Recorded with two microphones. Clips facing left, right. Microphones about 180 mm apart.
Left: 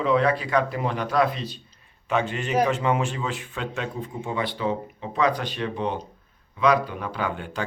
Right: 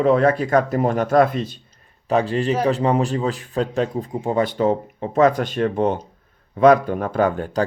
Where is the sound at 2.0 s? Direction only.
35° right (ahead or behind).